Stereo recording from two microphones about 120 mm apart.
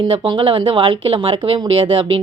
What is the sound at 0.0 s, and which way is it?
Speech, 40° right (ahead or behind).